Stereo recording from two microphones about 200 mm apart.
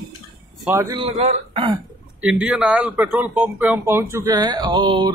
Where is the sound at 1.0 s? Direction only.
30° right (ahead or behind).